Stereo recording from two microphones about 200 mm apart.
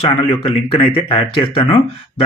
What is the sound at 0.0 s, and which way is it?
Speech, 30° left (ahead or behind).